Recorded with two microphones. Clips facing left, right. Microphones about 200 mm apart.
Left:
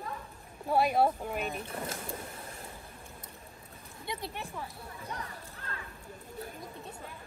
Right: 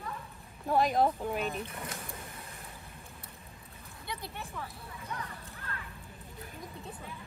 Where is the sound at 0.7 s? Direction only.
10° left (ahead or behind).